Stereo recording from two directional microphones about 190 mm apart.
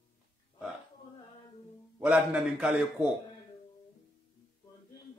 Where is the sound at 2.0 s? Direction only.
5° right (ahead or behind).